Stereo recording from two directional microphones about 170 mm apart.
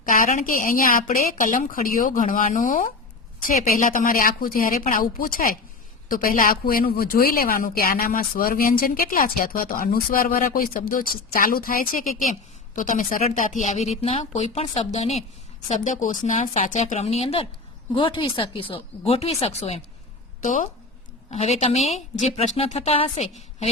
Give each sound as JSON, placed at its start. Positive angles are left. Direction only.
{"t": 0.1, "sound": "a woman's voice", "side_deg": 50}